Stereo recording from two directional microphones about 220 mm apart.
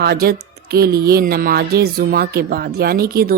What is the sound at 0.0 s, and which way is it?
A woman's voice, 45° right (ahead or behind).